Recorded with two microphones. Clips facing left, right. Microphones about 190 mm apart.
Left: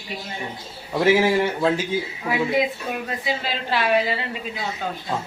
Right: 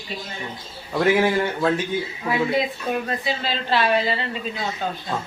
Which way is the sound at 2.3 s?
10° left (ahead or behind).